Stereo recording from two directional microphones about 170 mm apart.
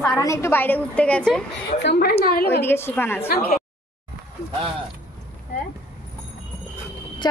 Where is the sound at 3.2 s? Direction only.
65° left (ahead or behind).